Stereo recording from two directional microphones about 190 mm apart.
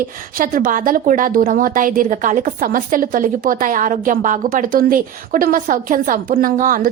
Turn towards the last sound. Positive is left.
turn(degrees=-45)  # may be behind; listen again after turning